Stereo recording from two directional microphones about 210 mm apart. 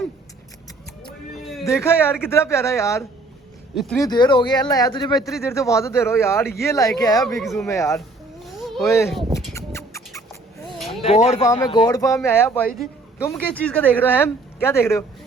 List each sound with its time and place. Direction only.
1.6 s a man's voice: 10° left (ahead or behind)
3.8 s speech: centre (ahead or behind)
4.0 s a man's voice: 20° left (ahead or behind)
7.3 s speech: centre (ahead or behind)
7.7 s a man's voice: 15° left (ahead or behind)
8.4 s a sound: centre (ahead or behind)
9.5 s rodents: 15° left (ahead or behind)
11.0 s a man's voice: 30° left (ahead or behind); by 15.0 s 10° left (ahead or behind)